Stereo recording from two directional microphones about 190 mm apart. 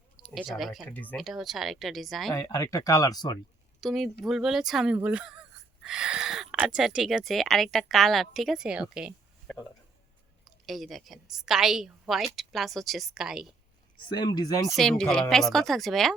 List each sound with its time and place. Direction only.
0.3 s speech: centre (ahead or behind)
2.3 s speech: 15° left (ahead or behind)
3.8 s speech: centre (ahead or behind)
10.4 s speech: centre (ahead or behind)
14.1 s speech: 20° left (ahead or behind)
14.8 s speech: 5° left (ahead or behind)